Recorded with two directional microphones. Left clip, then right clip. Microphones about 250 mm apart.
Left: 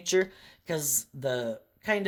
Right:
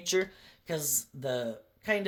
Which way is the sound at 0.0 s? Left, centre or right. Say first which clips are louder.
Left 3 dB; left.